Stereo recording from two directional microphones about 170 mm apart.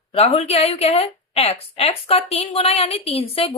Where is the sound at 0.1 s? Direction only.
40° left (ahead or behind).